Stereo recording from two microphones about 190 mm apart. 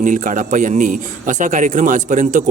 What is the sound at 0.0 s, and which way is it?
A man's voice, 45° right (ahead or behind).